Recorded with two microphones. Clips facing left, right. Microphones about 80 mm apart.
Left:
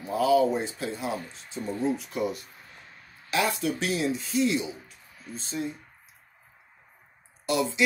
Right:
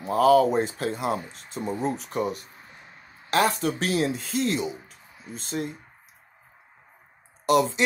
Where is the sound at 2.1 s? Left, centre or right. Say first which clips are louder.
Right 2 dB; right.